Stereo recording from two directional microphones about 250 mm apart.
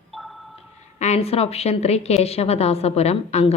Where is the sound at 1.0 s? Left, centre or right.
Left.